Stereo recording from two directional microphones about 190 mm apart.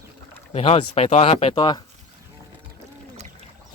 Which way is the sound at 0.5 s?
30° left (ahead or behind).